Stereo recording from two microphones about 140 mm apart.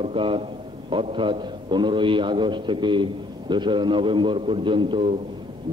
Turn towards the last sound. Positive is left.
turn(degrees=-40)  # may be behind; listen again after turning